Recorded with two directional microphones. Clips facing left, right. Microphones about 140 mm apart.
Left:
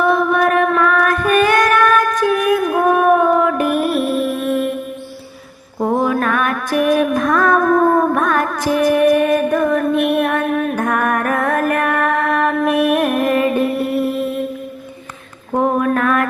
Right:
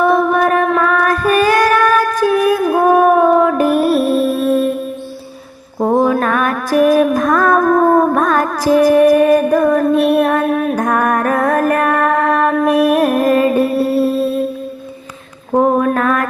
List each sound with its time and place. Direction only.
0.1 s child singing: 30° right (ahead or behind)
5.8 s music: 35° right (ahead or behind)
15.5 s a sound: 35° right (ahead or behind)